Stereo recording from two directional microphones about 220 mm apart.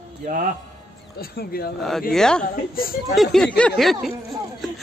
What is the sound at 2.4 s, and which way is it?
Speech, 40° left (ahead or behind).